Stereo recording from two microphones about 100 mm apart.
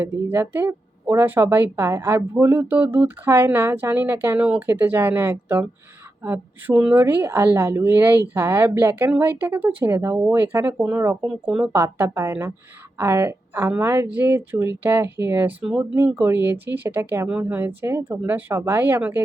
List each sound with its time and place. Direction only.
0.0 s speech: 20° right (ahead or behind)
11.3 s speech: 10° right (ahead or behind)
11.8 s speech: 25° right (ahead or behind)
15.6 s speech: 10° right (ahead or behind)
16.0 s speech: 20° right (ahead or behind)